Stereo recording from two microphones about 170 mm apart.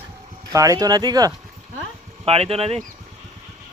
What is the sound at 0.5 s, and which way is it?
Speech, 20° right (ahead or behind).